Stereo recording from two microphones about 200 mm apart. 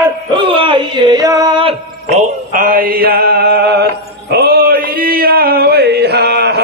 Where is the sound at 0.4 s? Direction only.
25° right (ahead or behind).